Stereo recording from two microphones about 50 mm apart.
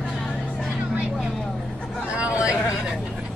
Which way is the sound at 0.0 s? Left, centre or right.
Centre.